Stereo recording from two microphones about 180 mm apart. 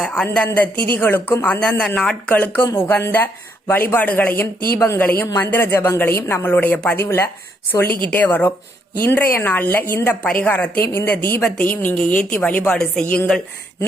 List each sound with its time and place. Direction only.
0.0 s speech: 5° left (ahead or behind)